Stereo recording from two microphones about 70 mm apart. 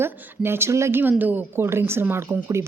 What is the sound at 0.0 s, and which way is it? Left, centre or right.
A woman's voice, right.